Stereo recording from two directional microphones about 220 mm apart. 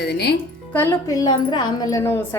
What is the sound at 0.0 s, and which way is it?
Speech, 50° left (ahead or behind).